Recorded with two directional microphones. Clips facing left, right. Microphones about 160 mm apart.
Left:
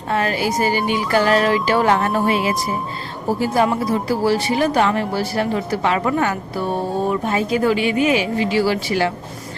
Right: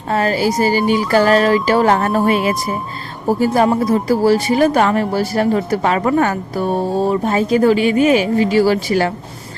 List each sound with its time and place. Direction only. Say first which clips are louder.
0.1 s speech: right 4 dB; 35° right (ahead or behind)